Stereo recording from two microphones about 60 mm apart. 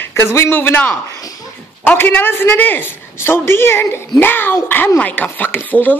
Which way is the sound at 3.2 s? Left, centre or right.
Left.